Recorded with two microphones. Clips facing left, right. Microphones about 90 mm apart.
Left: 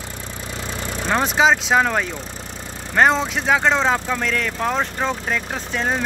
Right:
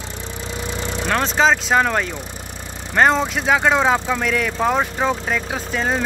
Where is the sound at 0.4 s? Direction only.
20° right (ahead or behind).